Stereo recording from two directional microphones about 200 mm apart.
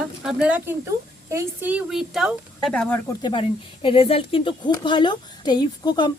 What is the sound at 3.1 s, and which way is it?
A woman's voice, 20° left (ahead or behind).